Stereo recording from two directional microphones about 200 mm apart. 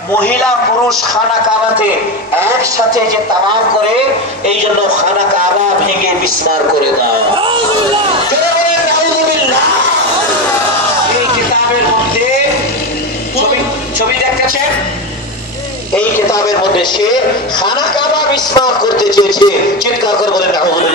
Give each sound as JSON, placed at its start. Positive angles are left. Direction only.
{"t": 16.0, "sound": "a man's voice", "side_deg": 15}